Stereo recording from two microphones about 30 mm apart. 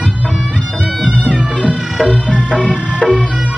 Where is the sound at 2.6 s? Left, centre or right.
Left.